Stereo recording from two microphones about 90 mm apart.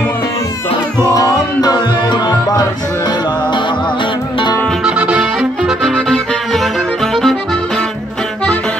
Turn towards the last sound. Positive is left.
turn(degrees=5)  # may be behind; listen again after turning